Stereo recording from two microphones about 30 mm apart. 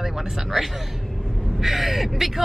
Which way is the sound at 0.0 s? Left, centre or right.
Centre.